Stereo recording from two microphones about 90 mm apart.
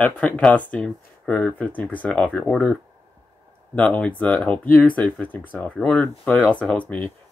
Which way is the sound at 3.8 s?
15° left (ahead or behind).